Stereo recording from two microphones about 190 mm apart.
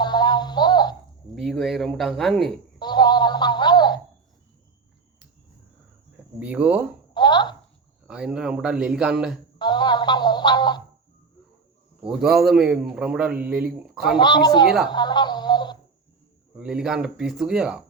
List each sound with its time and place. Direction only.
0.0 s music: 20° left (ahead or behind)
1.4 s a man's voice: centre (ahead or behind)
2.7 s speech: 20° left (ahead or behind)
6.1 s speech: 5° right (ahead or behind)
7.1 s a sound: 20° left (ahead or behind)
8.0 s a man's voice: 5° right (ahead or behind)
9.6 s speech: 20° left (ahead or behind)
12.0 s a man's voice: centre (ahead or behind)
14.2 s speech: 20° left (ahead or behind)
16.6 s a man's voice: 5° right (ahead or behind)